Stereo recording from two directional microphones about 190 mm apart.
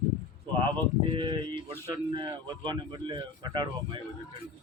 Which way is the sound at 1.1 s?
25° right (ahead or behind).